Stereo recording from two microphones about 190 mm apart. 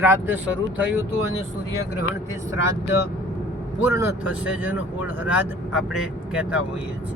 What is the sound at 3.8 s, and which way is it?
Speech, 15° right (ahead or behind).